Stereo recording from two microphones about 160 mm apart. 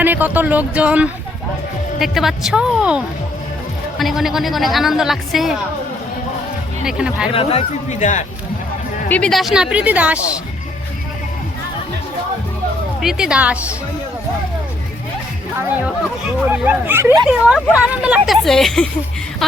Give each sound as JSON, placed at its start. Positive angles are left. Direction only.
{"t": 0.0, "sound": "a woman's voice", "side_deg": -10}
{"t": 6.8, "sound": "a woman's voice", "side_deg": -5}
{"t": 7.3, "sound": "speech", "side_deg": 40}
{"t": 9.0, "sound": "a woman's voice", "side_deg": 10}
{"t": 13.0, "sound": "a woman's voice", "side_deg": -5}
{"t": 16.5, "sound": "a woman's voice", "side_deg": -10}
{"t": 19.4, "sound": "music", "side_deg": 0}